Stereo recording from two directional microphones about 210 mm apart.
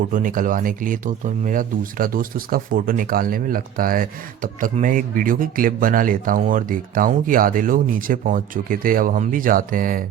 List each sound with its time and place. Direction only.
0.0 s speech: 40° right (ahead or behind)